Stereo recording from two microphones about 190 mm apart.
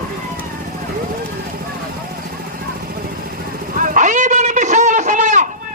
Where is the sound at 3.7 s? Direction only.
45° right (ahead or behind).